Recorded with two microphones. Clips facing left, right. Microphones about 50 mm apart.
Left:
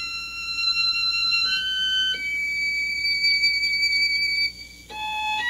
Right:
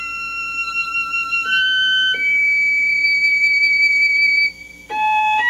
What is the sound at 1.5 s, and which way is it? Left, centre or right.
Music, right.